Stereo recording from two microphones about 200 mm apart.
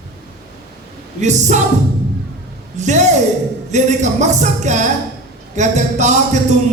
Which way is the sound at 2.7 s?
35° right (ahead or behind).